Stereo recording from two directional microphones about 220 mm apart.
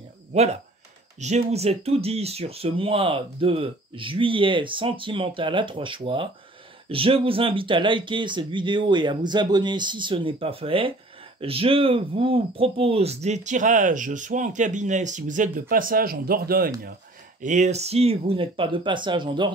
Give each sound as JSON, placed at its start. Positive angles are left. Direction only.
{"t": 0.3, "sound": "speech", "side_deg": -30}